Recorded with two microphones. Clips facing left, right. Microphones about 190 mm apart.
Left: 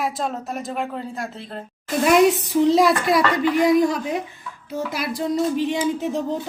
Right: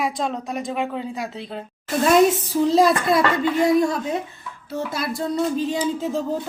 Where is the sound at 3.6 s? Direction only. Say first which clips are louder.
Left 1 dB; 25° right (ahead or behind).